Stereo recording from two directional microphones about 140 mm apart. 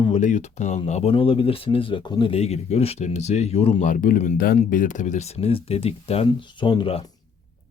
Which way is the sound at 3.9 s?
70° left (ahead or behind).